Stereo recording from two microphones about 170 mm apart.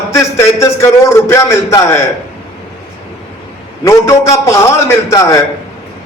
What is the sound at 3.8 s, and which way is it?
A man's voice, 15° left (ahead or behind).